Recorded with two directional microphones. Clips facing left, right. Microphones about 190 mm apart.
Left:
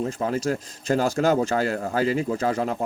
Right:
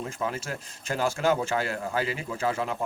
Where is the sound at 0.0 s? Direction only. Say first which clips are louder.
Left 7 dB; 40° left (ahead or behind).